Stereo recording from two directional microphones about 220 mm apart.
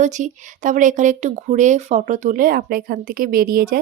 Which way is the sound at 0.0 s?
35° right (ahead or behind).